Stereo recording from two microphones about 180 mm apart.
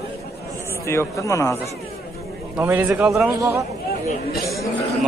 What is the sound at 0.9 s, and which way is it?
Speech, 15° left (ahead or behind).